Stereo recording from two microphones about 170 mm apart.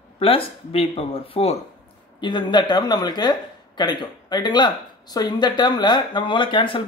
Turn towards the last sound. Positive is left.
turn(degrees=30)  # may be behind; listen again after turning